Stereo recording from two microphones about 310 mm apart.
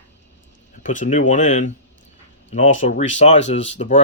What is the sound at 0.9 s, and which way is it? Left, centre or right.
Speech, left.